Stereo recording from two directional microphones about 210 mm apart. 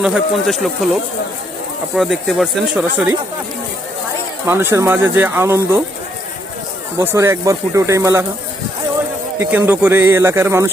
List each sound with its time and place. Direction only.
0.0 s speech: centre (ahead or behind)
2.0 s speech: centre (ahead or behind)
4.4 s speech: 10° right (ahead or behind)
7.0 s speech: 10° right (ahead or behind)
9.4 s speech: 10° right (ahead or behind)